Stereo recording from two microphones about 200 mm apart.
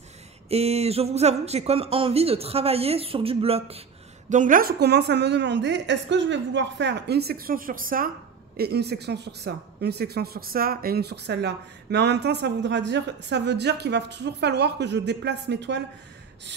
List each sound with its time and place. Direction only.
0.5 s speech: 30° right (ahead or behind)
4.3 s speech: 40° right (ahead or behind); by 15.8 s 60° right (ahead or behind)